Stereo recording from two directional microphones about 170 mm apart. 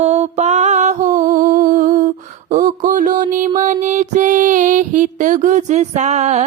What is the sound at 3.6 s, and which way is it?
Music, 45° right (ahead or behind).